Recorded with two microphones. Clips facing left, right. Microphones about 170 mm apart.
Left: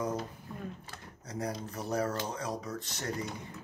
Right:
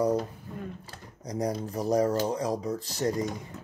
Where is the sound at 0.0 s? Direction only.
35° right (ahead or behind).